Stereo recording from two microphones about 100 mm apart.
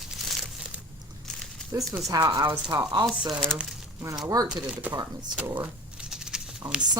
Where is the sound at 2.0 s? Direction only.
40° right (ahead or behind).